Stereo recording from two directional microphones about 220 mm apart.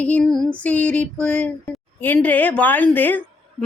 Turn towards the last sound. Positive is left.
turn(degrees=10)  # may be behind; listen again after turning